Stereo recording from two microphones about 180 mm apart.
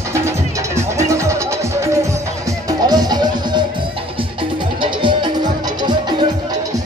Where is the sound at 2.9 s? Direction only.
20° right (ahead or behind).